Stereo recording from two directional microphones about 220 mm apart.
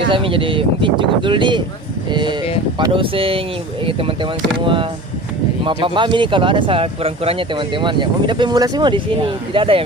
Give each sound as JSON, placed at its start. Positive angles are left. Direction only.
{"t": 0.1, "sound": "speech", "side_deg": -25}